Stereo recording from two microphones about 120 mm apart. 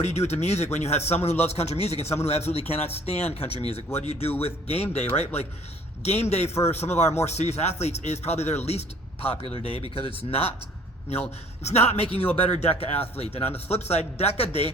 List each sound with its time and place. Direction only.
0.0 s a man's voice: 65° left (ahead or behind)
3.5 s speech: 35° right (ahead or behind)
3.9 s a man's voice: 60° left (ahead or behind)
9.2 s speech: 50° left (ahead or behind)
11.1 s a man's voice: 60° left (ahead or behind)